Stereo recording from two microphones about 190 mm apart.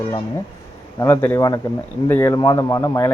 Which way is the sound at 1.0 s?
15° left (ahead or behind).